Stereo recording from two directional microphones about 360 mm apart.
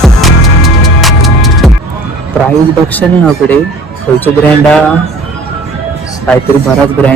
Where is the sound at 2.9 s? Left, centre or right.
Centre.